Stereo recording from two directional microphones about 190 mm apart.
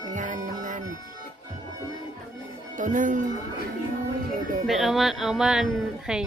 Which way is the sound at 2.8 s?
45° right (ahead or behind).